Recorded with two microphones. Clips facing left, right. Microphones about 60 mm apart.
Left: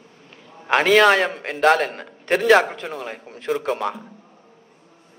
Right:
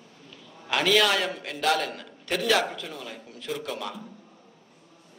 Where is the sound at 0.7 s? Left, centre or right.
Left.